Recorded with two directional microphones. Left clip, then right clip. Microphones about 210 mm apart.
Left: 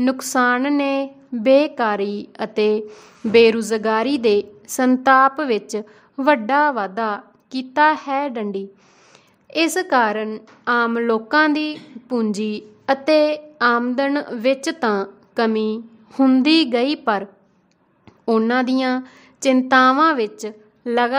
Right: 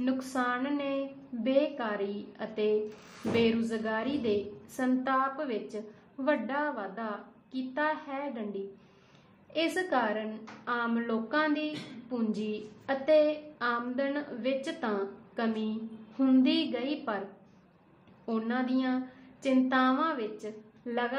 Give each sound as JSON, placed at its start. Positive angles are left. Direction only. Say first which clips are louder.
{"t": 0.0, "sound": "a woman's voice", "louder": "left 13 dB", "side_deg": 55}
{"t": 18.2, "sound": "a woman's voice", "louder": "left 15 dB", "side_deg": 60}